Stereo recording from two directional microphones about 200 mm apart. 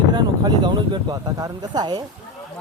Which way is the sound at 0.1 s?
20° right (ahead or behind).